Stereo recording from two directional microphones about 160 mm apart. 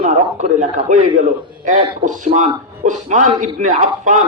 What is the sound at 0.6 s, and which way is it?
A man's voice, 50° right (ahead or behind).